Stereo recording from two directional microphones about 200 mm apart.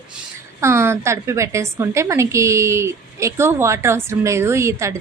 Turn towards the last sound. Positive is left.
turn(degrees=-15)  # may be behind; listen again after turning